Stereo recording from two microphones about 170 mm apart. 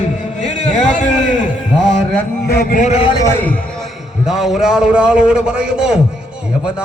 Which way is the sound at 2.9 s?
30° left (ahead or behind).